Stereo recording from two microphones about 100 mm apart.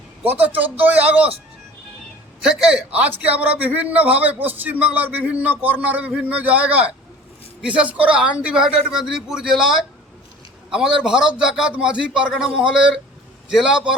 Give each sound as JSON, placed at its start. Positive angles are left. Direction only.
{"t": 0.3, "sound": "a man's voice", "side_deg": -15}
{"t": 2.4, "sound": "a man's voice", "side_deg": -10}